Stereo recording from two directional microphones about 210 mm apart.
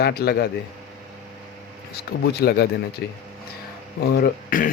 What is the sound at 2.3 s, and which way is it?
Speech, 50° left (ahead or behind).